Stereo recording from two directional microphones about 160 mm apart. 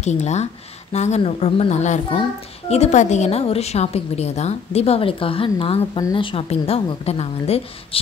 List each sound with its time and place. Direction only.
0.0 s a child's voice: 45° left (ahead or behind)